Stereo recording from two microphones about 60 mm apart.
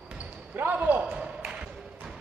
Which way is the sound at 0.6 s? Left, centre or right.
Right.